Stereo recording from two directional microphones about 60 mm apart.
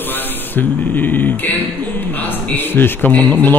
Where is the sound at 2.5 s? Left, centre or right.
Left.